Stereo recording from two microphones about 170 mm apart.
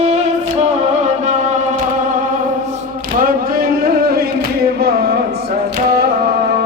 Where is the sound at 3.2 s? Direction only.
60° right (ahead or behind).